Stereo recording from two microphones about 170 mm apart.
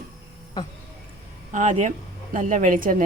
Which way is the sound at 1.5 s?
45° right (ahead or behind).